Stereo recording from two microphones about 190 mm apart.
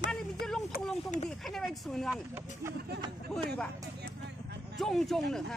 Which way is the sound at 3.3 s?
Centre (ahead or behind).